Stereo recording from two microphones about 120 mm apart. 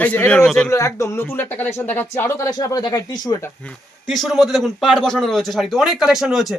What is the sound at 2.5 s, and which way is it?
Speech, 30° left (ahead or behind).